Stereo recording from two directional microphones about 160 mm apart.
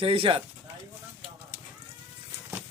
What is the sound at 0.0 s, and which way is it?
Speech, 35° right (ahead or behind).